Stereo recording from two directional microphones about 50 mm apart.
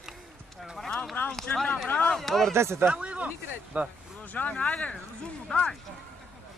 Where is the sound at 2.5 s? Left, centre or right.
Right.